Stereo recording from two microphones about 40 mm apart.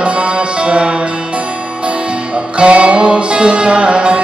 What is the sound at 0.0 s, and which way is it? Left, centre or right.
Music, right.